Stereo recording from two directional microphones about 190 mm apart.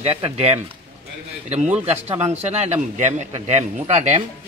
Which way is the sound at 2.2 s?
35° right (ahead or behind).